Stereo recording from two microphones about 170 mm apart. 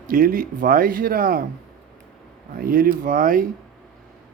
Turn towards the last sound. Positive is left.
turn(degrees=-55)  # may be behind; listen again after turning